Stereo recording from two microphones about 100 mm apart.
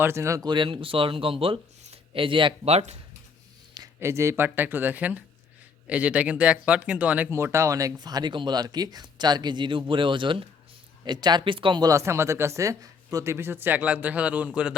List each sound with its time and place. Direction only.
0.0 s speech: 25° right (ahead or behind)
0.4 s speech: 55° right (ahead or behind); by 3.0 s 90° right
4.0 s speech: 25° right (ahead or behind)
7.3 s speech: 25° right (ahead or behind); by 11.9 s 55° right (ahead or behind)
11.9 s speech: 30° right (ahead or behind); by 14.7 s 10° right (ahead or behind)